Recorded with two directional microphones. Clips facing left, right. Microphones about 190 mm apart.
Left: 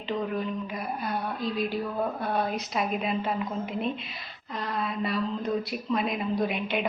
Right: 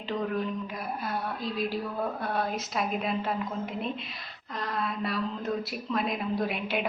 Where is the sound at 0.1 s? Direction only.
Centre (ahead or behind).